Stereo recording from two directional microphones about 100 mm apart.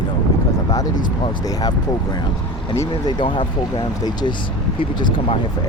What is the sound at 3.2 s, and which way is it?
Speech, 55° left (ahead or behind).